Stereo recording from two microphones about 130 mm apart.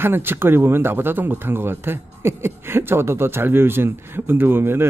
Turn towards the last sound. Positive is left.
turn(degrees=-15)  # may be behind; listen again after turning